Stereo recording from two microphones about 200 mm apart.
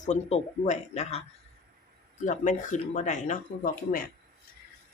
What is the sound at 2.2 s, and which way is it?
Speech, 40° left (ahead or behind).